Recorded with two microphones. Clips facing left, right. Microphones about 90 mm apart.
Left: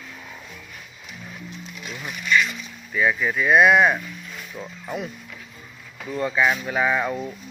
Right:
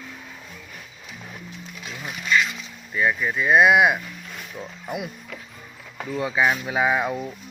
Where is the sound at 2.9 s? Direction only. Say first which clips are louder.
Left 1 dB; centre (ahead or behind).